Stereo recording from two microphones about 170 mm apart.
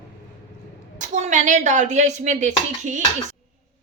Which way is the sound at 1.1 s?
45° right (ahead or behind).